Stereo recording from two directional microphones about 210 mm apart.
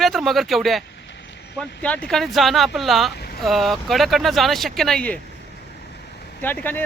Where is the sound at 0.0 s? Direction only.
Centre (ahead or behind).